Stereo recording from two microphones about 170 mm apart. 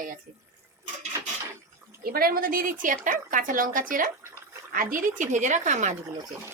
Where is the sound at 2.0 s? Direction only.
60° right (ahead or behind).